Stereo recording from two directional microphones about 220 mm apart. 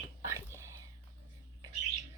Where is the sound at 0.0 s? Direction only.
10° right (ahead or behind).